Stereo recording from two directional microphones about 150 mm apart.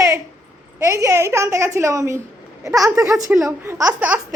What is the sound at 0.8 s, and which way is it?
A woman's voice, 20° right (ahead or behind).